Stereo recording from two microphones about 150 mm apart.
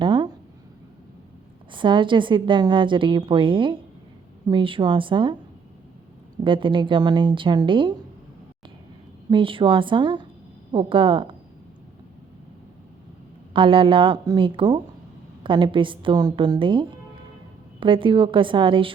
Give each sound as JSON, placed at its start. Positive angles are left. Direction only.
{"t": 0.0, "sound": "a sound", "side_deg": -30}
{"t": 1.7, "sound": "a woman's voice", "side_deg": -35}
{"t": 6.4, "sound": "a woman's voice", "side_deg": -35}
{"t": 9.3, "sound": "a woman's voice", "side_deg": -35}
{"t": 13.5, "sound": "a woman's voice", "side_deg": -35}